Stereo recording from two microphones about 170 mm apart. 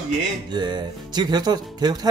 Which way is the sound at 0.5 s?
25° right (ahead or behind).